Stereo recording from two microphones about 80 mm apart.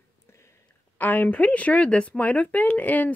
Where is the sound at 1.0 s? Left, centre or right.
Left.